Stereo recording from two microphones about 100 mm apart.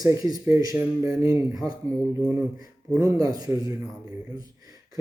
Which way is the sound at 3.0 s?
35° right (ahead or behind).